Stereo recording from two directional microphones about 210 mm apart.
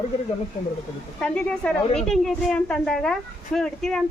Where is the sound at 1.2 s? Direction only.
5° left (ahead or behind).